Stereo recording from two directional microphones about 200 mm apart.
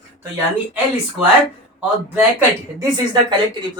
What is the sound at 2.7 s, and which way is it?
Speech, 20° right (ahead or behind).